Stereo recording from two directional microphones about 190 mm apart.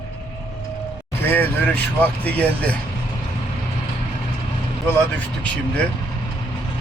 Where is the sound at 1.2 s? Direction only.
10° left (ahead or behind).